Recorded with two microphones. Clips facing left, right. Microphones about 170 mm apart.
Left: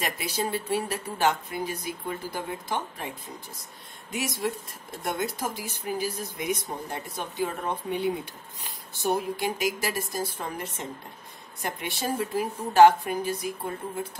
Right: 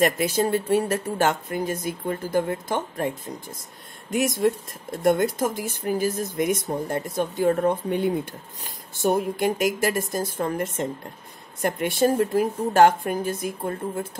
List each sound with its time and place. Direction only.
0.0 s speech: 50° right (ahead or behind)